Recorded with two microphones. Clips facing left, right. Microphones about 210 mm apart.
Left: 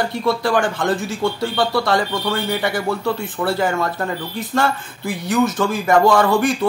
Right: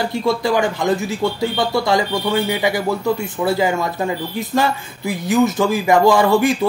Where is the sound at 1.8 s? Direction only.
15° right (ahead or behind).